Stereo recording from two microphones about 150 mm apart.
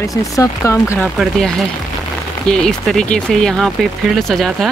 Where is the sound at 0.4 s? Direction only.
20° left (ahead or behind).